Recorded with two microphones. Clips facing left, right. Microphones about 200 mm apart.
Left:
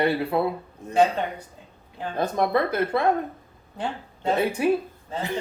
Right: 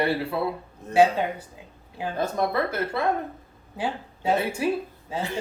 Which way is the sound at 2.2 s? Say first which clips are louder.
Left 3 dB; 20° left (ahead or behind).